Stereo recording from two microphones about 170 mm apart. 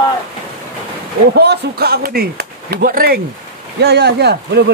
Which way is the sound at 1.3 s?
75° right (ahead or behind).